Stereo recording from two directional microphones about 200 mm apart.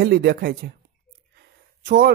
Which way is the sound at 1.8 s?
50° right (ahead or behind).